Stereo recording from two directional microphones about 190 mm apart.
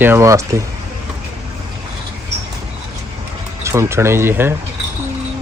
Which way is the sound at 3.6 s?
15° right (ahead or behind).